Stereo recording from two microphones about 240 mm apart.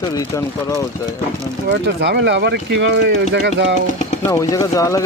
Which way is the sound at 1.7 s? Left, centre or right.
Right.